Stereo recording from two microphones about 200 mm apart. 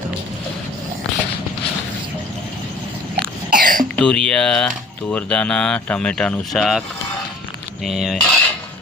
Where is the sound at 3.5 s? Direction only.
45° right (ahead or behind).